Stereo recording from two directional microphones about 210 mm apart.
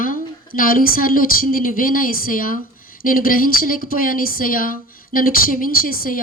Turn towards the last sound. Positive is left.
turn(degrees=45)  # may be behind; listen again after turning